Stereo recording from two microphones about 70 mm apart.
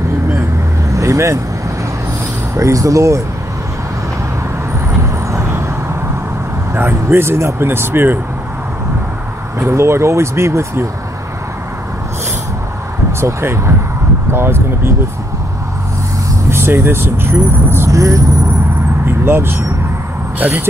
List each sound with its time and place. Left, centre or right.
0.8 s vehicle: right
2.5 s speech: right
5.0 s vehicle: right
6.7 s speech: right
9.6 s speech: right
13.2 s speech: right
16.4 s speech: right
19.0 s speech: right
20.3 s speech: right